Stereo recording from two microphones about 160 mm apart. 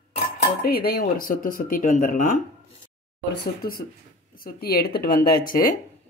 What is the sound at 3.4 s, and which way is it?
Speech, 70° left (ahead or behind).